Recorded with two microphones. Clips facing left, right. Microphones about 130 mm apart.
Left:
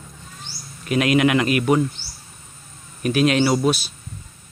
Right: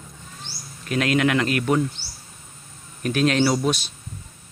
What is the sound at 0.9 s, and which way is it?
Speech, 15° left (ahead or behind).